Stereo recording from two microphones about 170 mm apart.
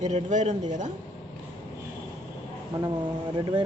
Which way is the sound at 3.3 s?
30° right (ahead or behind).